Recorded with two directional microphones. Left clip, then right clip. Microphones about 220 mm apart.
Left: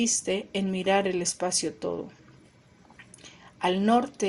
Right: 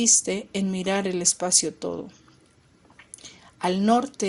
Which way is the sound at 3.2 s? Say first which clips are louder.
Right 1 dB; 30° right (ahead or behind).